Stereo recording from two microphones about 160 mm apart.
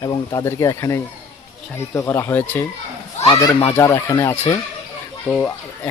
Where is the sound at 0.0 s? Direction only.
20° left (ahead or behind).